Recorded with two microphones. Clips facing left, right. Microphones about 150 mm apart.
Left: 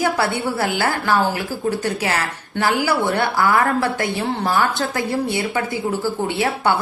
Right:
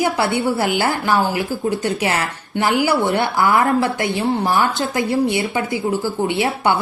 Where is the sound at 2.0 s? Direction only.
20° right (ahead or behind).